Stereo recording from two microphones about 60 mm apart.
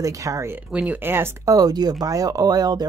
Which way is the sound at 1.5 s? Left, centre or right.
Right.